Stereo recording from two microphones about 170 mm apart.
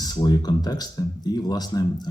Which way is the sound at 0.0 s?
25° left (ahead or behind).